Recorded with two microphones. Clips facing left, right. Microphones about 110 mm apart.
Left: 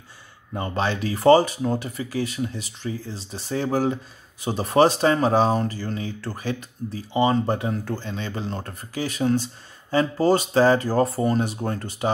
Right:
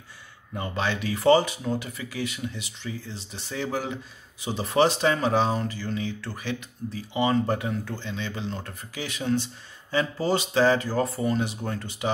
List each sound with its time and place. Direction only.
0.6 s speech: 35° left (ahead or behind)